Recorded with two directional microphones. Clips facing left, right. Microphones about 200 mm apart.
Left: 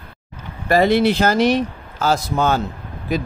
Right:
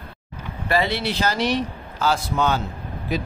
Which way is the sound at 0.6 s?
45° left (ahead or behind).